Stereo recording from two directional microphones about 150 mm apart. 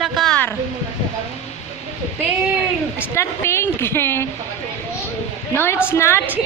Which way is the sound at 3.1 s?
20° left (ahead or behind).